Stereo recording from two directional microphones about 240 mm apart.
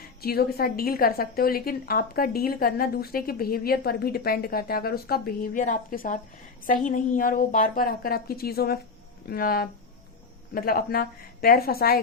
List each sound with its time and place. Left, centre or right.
0.2 s a woman's voice: left